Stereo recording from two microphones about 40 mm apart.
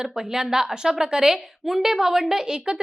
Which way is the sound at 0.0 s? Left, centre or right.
Centre.